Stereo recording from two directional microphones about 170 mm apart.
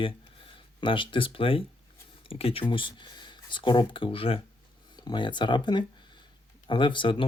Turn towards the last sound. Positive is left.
turn(degrees=30)  # may be behind; listen again after turning